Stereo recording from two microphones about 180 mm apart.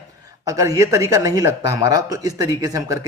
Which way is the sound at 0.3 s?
20° right (ahead or behind).